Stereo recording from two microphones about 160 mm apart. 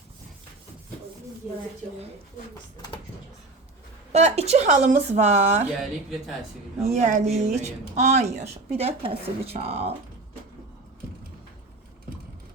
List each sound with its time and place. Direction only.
4.1 s a woman's voice: 40° right (ahead or behind)
5.6 s speech: centre (ahead or behind)
6.9 s a woman's voice: 45° right (ahead or behind)